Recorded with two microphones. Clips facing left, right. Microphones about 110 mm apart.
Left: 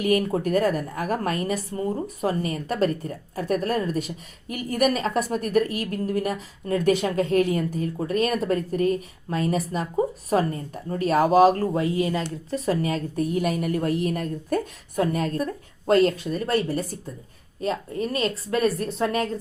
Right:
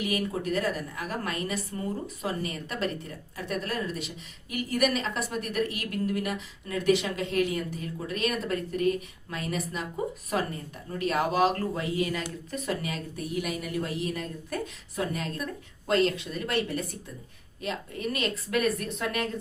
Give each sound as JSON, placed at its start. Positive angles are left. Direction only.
{"t": 0.0, "sound": "a woman's voice", "side_deg": 45}